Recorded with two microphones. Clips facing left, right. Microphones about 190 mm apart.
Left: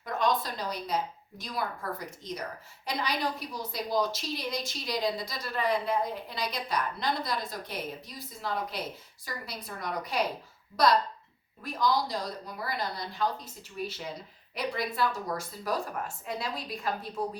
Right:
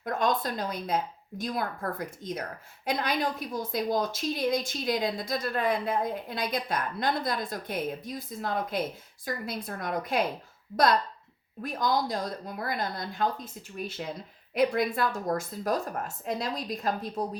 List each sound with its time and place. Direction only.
0.0 s a woman's voice: 50° right (ahead or behind)
11.6 s a woman's voice: 50° right (ahead or behind)